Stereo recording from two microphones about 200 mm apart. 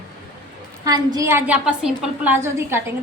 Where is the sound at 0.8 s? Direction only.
20° right (ahead or behind).